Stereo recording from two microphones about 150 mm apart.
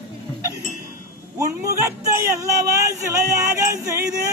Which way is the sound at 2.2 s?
20° right (ahead or behind).